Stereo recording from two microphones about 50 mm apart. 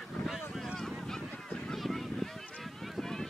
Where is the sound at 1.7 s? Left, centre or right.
Centre.